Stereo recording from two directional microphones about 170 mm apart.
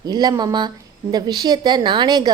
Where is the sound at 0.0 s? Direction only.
25° right (ahead or behind).